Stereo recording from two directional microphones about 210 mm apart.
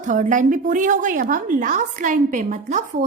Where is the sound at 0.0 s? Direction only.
35° right (ahead or behind).